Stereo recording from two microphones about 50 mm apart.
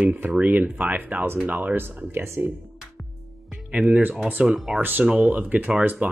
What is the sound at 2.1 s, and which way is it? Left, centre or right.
Speech, right.